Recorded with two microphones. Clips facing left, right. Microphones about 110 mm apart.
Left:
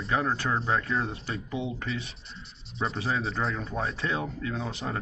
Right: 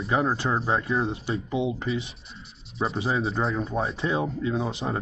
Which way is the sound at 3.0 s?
30° right (ahead or behind).